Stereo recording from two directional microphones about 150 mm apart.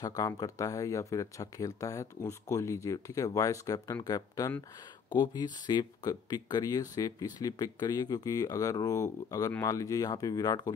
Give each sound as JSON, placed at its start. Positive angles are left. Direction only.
{"t": 0.0, "sound": "speech", "side_deg": 25}